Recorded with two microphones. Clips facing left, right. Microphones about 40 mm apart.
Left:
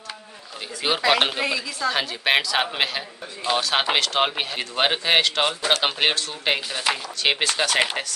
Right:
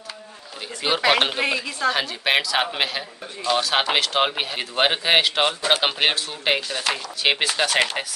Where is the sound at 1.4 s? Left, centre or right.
Right.